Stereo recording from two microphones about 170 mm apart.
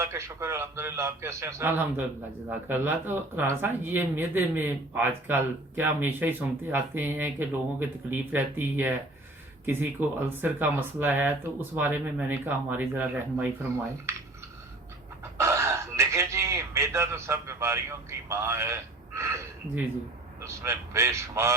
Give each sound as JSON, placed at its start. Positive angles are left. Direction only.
{"t": 0.0, "sound": "speech", "side_deg": -15}
{"t": 15.2, "sound": "a sound", "side_deg": -15}
{"t": 18.3, "sound": "a man's voice", "side_deg": -15}